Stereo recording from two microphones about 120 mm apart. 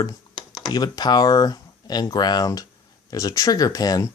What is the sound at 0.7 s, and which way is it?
Speech, 35° left (ahead or behind).